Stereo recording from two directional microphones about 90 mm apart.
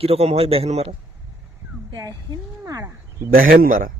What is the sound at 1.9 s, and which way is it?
Speech, 40° right (ahead or behind).